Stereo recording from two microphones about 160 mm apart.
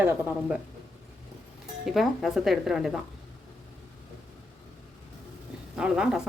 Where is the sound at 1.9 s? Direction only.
Centre (ahead or behind).